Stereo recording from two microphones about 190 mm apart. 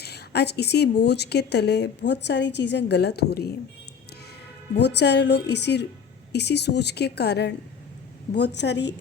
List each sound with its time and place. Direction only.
0.0 s a woman's voice: 60° left (ahead or behind)
4.7 s a woman's voice: 65° left (ahead or behind)